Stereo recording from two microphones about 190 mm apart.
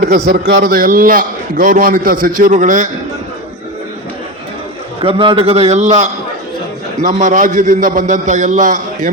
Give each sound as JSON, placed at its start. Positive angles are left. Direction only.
{"t": 0.0, "sound": "a man's voice", "side_deg": -50}
{"t": 4.9, "sound": "a man's voice", "side_deg": -30}